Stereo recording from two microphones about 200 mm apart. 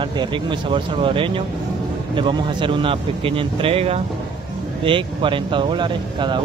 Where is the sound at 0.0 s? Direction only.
25° right (ahead or behind).